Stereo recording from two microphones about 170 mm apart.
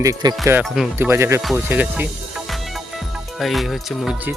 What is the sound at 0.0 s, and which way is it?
Speech, 20° right (ahead or behind).